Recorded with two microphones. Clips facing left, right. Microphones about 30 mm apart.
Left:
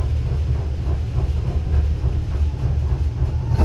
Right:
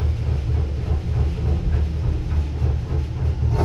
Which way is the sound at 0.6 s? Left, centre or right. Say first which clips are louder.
Right 1 dB; centre.